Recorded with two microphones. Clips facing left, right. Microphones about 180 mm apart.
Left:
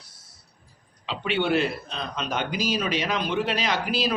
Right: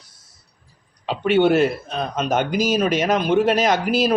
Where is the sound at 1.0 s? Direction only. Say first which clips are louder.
Right 9 dB; 50° right (ahead or behind).